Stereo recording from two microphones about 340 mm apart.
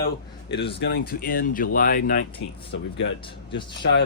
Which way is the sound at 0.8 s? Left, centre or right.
Left.